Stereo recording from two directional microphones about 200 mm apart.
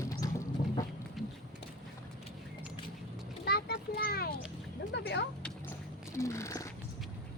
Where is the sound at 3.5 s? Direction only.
55° left (ahead or behind).